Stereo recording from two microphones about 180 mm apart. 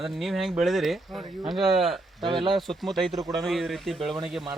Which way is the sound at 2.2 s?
25° right (ahead or behind).